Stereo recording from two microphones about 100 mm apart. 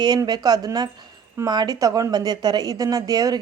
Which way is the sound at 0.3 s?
45° right (ahead or behind).